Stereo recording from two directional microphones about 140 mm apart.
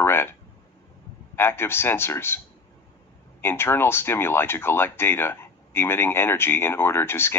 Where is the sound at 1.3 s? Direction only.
15° left (ahead or behind).